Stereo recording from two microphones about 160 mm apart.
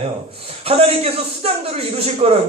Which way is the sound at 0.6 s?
35° right (ahead or behind).